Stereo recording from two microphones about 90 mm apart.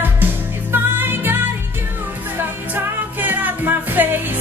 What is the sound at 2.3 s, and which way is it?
Music, 20° right (ahead or behind).